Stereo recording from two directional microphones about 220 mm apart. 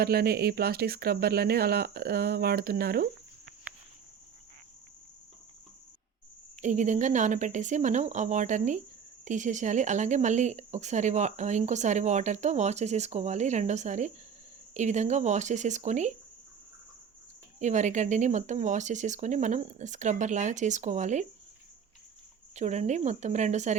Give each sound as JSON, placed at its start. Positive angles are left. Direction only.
{"t": 0.0, "sound": "speech", "side_deg": -45}
{"t": 6.6, "sound": "speech", "side_deg": -35}
{"t": 17.6, "sound": "speech", "side_deg": -35}
{"t": 22.5, "sound": "speech", "side_deg": -30}